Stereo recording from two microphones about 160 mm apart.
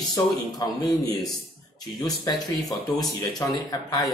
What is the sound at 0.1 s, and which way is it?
Speech, 25° left (ahead or behind).